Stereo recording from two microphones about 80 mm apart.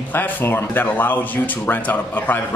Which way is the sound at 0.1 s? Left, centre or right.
Left.